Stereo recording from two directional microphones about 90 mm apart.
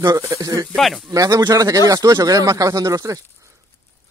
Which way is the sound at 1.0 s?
35° right (ahead or behind).